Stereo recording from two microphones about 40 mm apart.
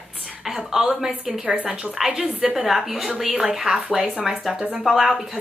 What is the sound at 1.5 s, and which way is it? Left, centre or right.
Speech, right.